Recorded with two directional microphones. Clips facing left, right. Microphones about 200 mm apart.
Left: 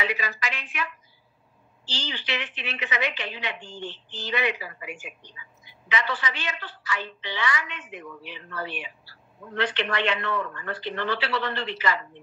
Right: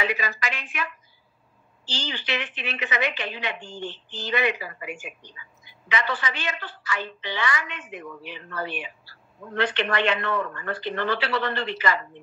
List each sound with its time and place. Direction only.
0.0 s a woman's voice: 50° right (ahead or behind)